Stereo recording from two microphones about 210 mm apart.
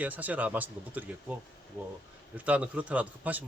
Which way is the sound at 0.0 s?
10° right (ahead or behind).